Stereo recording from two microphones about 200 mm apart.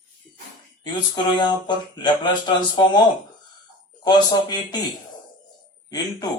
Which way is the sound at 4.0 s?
20° left (ahead or behind).